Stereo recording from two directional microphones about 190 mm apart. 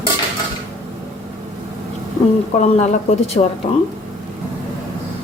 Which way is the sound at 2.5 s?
35° left (ahead or behind).